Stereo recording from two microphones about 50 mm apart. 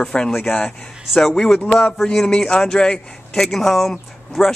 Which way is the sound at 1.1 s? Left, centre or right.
Centre.